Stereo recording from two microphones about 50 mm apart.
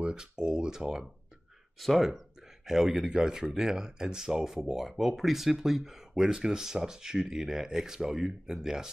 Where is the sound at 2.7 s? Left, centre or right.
Centre.